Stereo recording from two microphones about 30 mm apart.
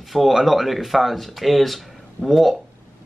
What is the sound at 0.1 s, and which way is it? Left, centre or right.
Speech, centre.